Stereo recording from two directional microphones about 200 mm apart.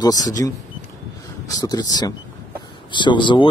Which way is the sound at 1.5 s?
20° left (ahead or behind).